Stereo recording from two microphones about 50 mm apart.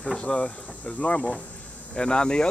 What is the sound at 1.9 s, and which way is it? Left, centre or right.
Speech, centre.